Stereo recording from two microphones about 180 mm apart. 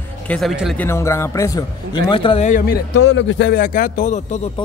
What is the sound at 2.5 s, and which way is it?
Speech, 50° left (ahead or behind).